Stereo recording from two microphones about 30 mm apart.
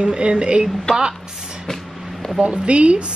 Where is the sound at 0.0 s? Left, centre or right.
Right.